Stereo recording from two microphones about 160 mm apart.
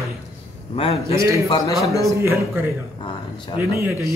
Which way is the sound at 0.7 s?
35° left (ahead or behind).